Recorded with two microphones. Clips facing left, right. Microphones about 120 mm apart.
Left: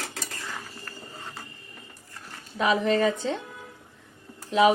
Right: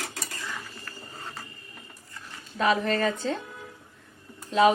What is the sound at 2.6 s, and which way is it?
Speech, 15° left (ahead or behind).